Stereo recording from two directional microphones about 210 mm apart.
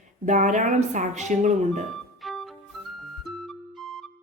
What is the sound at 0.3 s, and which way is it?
Speech, 35° right (ahead or behind).